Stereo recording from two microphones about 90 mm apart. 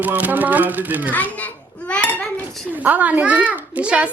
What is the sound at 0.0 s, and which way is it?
Speech, 20° right (ahead or behind).